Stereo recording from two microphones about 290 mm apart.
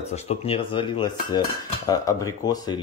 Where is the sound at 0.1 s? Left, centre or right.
Left.